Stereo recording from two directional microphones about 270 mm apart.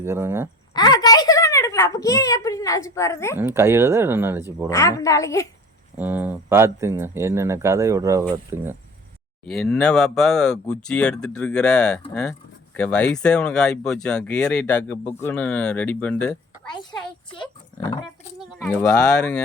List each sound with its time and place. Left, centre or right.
0.0 s speech: centre
0.7 s a woman's voice: centre
3.3 s speech: centre
4.7 s a woman's voice: centre
6.0 s speech: centre
17.3 s speech: centre
18.3 s speech: centre